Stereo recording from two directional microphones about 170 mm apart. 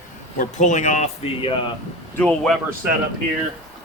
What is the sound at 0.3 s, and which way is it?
Speech, 45° left (ahead or behind).